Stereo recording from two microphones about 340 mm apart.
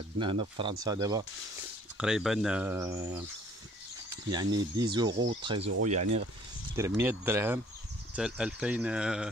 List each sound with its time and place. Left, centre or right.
0.2 s speech: centre
6.8 s speech: centre